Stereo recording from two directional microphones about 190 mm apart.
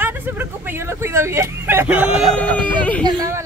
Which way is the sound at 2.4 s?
10° left (ahead or behind).